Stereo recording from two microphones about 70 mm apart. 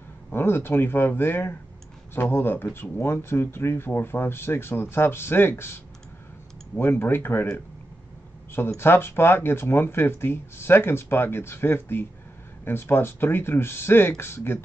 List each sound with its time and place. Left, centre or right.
0.3 s speech: left
6.7 s speech: left
8.5 s speech: left